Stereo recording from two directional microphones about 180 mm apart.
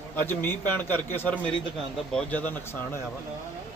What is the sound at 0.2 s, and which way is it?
Speech, 10° left (ahead or behind).